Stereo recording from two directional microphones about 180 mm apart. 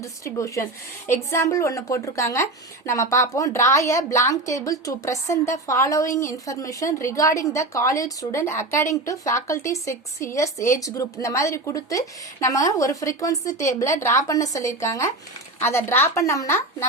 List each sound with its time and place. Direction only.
0.0 s a woman's voice: 15° left (ahead or behind)